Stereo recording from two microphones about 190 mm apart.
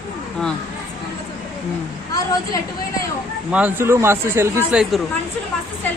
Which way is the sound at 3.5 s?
10° right (ahead or behind).